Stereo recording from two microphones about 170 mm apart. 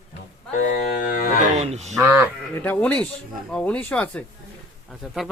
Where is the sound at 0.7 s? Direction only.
60° left (ahead or behind).